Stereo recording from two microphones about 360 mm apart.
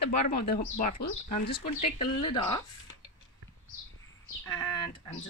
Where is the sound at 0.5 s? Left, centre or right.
Left.